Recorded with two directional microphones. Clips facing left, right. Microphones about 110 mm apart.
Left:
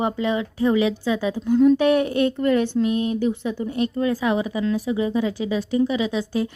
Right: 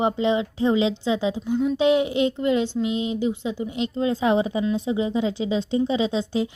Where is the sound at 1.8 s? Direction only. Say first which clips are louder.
Left 1 dB; 20° right (ahead or behind).